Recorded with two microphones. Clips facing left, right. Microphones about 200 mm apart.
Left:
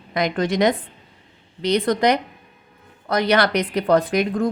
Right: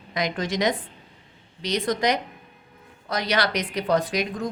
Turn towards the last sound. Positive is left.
turn(degrees=55)  # may be behind; listen again after turning